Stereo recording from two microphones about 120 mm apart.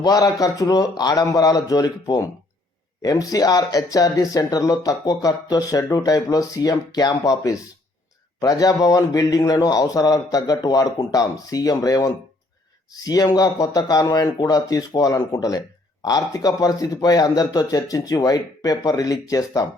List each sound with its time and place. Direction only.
0.0 s speech: 30° left (ahead or behind)